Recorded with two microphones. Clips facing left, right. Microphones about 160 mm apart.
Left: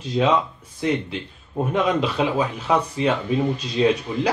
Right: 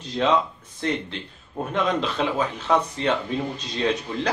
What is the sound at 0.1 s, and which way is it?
Speech, 10° left (ahead or behind).